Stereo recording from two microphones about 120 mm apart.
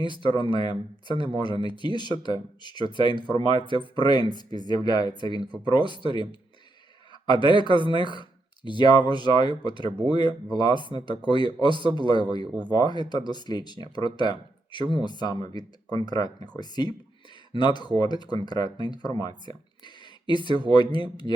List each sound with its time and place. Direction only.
0.0 s speech: 40° left (ahead or behind)
7.4 s speech: 40° left (ahead or behind)